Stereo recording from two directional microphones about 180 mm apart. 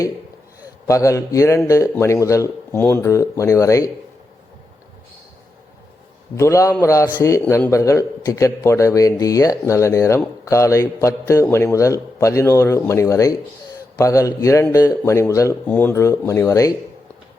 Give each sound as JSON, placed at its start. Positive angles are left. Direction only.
{"t": 0.9, "sound": "a man's voice", "side_deg": 20}
{"t": 6.3, "sound": "a man's voice", "side_deg": 15}